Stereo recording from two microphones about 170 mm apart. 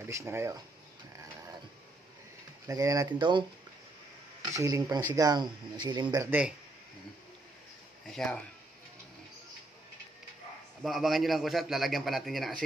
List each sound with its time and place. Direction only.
0.1 s speech: 15° right (ahead or behind)
2.6 s speech: 20° right (ahead or behind)
8.1 s a man's voice: 5° left (ahead or behind)
10.8 s a man's voice: centre (ahead or behind)